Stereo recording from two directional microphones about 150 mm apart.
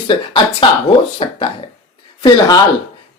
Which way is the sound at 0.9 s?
35° left (ahead or behind).